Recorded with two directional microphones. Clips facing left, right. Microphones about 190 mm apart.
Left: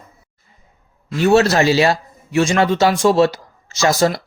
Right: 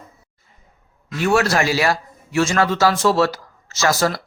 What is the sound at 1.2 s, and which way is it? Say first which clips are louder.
A man's voice: left 5 dB; 25° left (ahead or behind).